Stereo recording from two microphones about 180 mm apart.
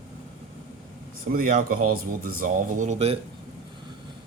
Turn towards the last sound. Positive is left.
turn(degrees=-40)  # may be behind; listen again after turning